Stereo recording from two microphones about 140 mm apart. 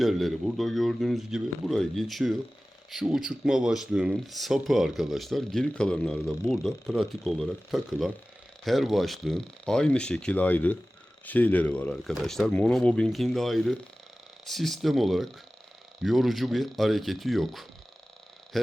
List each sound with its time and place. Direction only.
0.0 s speech: centre (ahead or behind)